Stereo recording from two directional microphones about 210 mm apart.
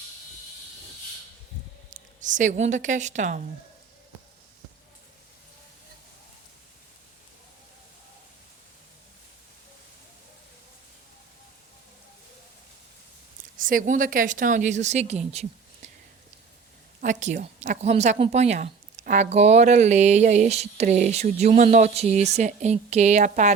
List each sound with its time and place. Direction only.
1.9 s speech: 35° right (ahead or behind)
13.6 s speech: 40° right (ahead or behind)
17.0 s speech: 35° right (ahead or behind)